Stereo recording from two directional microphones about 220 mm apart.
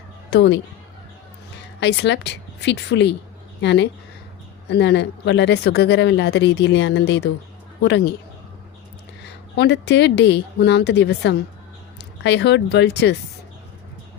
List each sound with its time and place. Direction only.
0.3 s speech: 50° left (ahead or behind)
1.8 s speech: 50° left (ahead or behind)
9.2 s speech: 50° left (ahead or behind)